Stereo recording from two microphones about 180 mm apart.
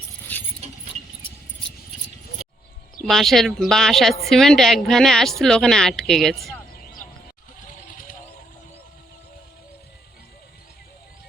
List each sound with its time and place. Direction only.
0.3 s a sound: 10° left (ahead or behind)
3.0 s a woman's voice: centre (ahead or behind)
7.9 s vehicle: 50° left (ahead or behind)